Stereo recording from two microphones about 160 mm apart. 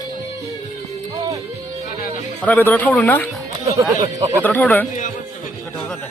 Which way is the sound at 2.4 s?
10° left (ahead or behind).